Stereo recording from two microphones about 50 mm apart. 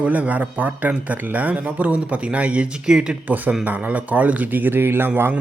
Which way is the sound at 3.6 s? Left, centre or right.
Right.